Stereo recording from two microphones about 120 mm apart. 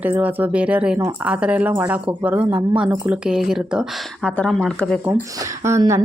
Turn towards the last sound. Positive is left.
turn(degrees=-25)  # may be behind; listen again after turning